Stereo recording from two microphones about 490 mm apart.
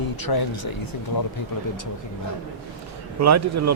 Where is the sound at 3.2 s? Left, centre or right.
Right.